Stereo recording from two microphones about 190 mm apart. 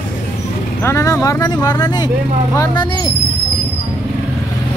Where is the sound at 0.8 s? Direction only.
15° left (ahead or behind).